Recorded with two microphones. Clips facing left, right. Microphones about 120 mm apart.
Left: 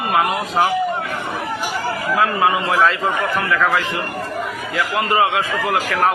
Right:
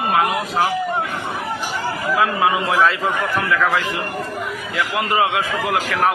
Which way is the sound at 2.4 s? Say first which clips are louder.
Left 1 dB; centre (ahead or behind).